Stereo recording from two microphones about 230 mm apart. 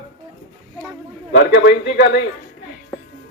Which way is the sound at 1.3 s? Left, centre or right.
Left.